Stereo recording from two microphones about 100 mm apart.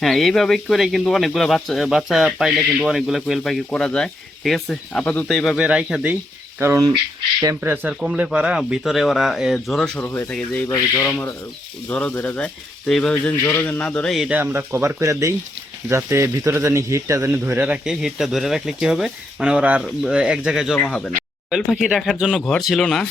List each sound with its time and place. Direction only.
0.0 s speech: centre (ahead or behind)
3.7 s speech: 10° left (ahead or behind)
5.5 s speech: 10° right (ahead or behind)
6.6 s speech: 25° right (ahead or behind); by 10.0 s 5° left (ahead or behind)
10.0 s speech: 20° left (ahead or behind)
14.1 s speech: 5° right (ahead or behind)
14.3 s speech: 20° right (ahead or behind)
20.7 s speech: 5° left (ahead or behind)